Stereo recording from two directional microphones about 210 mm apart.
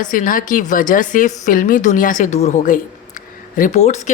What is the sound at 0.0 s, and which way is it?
A woman's voice, 40° left (ahead or behind).